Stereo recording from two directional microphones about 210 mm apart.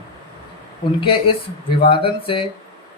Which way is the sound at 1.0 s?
25° left (ahead or behind).